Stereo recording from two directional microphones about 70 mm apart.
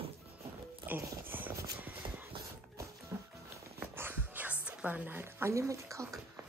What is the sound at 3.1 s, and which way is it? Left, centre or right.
Music, right.